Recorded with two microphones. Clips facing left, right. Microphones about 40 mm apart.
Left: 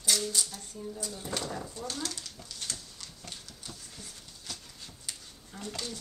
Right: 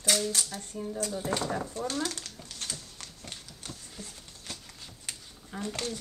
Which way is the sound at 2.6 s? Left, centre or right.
Right.